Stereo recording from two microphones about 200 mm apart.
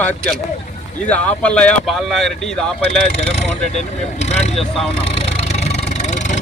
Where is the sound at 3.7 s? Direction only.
35° left (ahead or behind).